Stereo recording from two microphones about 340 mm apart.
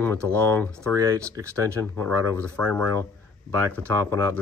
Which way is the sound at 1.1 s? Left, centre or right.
Centre.